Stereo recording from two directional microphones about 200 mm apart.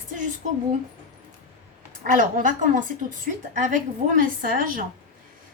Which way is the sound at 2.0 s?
40° right (ahead or behind).